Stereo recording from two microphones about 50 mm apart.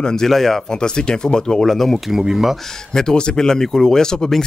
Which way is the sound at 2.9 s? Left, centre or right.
Centre.